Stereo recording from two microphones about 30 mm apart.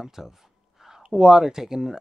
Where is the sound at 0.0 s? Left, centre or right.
Centre.